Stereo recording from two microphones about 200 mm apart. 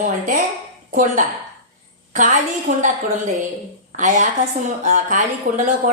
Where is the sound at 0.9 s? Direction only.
40° right (ahead or behind).